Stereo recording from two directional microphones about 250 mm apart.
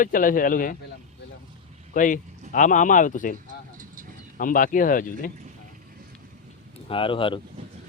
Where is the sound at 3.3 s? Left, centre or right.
Right.